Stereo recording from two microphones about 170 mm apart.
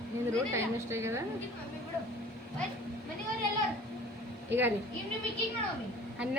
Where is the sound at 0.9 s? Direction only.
15° right (ahead or behind).